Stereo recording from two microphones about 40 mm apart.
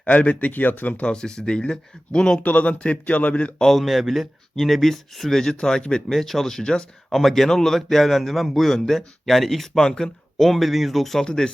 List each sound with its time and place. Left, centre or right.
0.0 s speech: left
1.0 s speech: centre
2.4 s speech: left
3.6 s a man's voice: centre
6.1 s speech: centre
6.6 s speech: centre
7.1 s a man's voice: centre
9.8 s a man's voice: centre
11.3 s speech: left